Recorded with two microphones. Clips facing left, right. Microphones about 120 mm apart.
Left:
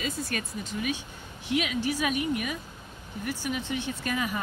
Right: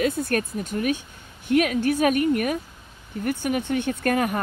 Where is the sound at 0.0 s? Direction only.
55° right (ahead or behind).